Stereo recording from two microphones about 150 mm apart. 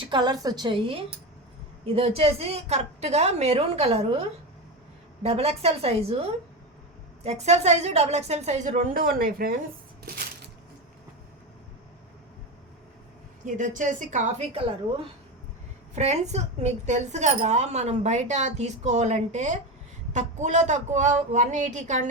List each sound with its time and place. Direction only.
0.0 s a woman's voice: 30° right (ahead or behind); by 9.6 s 75° right (ahead or behind)
13.4 s a woman's voice: 60° right (ahead or behind)
14.5 s a woman's voice: 35° right (ahead or behind)
16.0 s a woman's voice: 45° right (ahead or behind)